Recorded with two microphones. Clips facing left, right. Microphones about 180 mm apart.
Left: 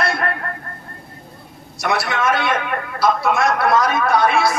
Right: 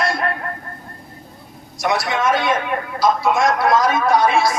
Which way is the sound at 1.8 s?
60° left (ahead or behind).